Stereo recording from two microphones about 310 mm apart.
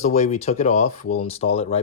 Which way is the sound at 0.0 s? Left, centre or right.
Left.